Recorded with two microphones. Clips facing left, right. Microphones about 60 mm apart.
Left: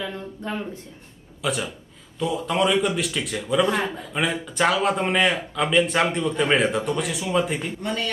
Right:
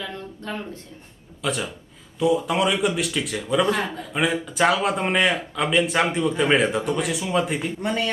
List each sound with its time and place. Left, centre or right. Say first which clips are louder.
0.0 s speech: left 2 dB; centre
1.4 s speech: even; centre
7.8 s speech: right 3 dB; right